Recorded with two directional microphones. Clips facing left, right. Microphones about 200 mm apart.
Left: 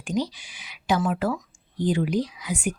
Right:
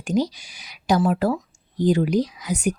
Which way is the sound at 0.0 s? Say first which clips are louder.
Right 4 dB; 45° right (ahead or behind).